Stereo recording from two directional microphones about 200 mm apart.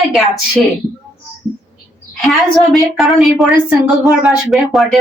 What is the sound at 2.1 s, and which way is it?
A woman's voice, centre (ahead or behind).